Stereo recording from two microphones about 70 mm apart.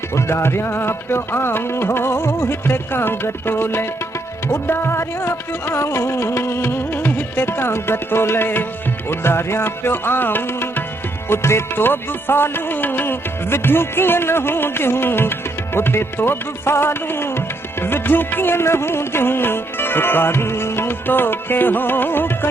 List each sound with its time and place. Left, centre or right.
0.1 s music: left